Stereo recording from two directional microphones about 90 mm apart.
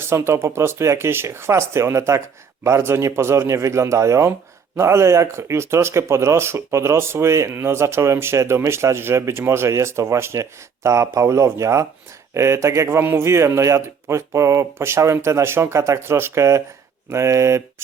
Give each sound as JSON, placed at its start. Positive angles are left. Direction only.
{"t": 0.0, "sound": "speech", "side_deg": -30}